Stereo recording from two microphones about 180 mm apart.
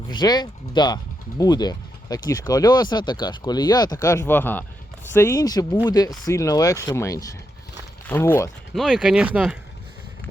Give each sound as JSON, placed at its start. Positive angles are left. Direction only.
{"t": 0.1, "sound": "speech", "side_deg": 25}
{"t": 8.7, "sound": "speech", "side_deg": 0}